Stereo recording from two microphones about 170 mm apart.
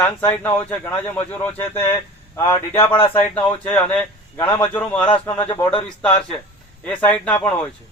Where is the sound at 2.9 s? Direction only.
30° left (ahead or behind).